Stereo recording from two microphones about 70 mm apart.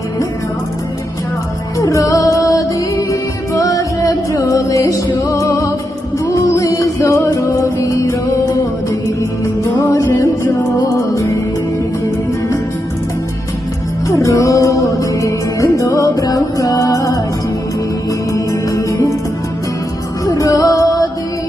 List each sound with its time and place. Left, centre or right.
1.8 s music: left
9.9 s music: left
14.1 s music: left
18.3 s music: left
20.2 s music: left